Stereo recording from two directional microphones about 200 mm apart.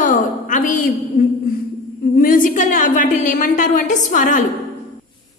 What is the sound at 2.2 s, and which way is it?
A woman's voice, 45° left (ahead or behind).